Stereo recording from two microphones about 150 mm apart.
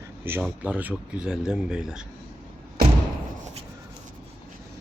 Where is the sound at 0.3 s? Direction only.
10° right (ahead or behind).